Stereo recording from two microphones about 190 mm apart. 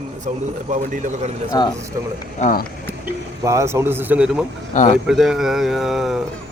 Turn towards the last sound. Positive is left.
turn(degrees=0)  # may be behind; listen again after turning